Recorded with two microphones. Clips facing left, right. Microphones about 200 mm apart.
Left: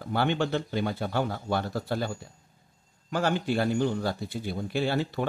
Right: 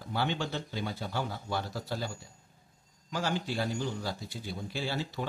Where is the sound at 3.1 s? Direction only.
60° left (ahead or behind).